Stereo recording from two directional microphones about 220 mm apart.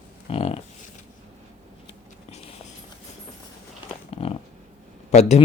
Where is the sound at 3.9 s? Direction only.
25° left (ahead or behind).